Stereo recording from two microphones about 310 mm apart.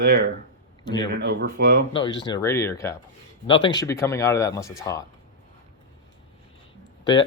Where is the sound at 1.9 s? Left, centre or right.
Centre.